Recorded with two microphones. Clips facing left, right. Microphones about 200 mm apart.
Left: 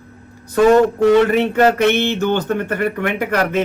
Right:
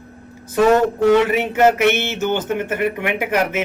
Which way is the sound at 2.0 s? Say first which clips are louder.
Left 3 dB; 5° right (ahead or behind).